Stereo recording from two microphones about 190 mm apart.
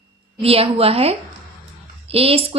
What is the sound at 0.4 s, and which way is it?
Speech, 30° right (ahead or behind).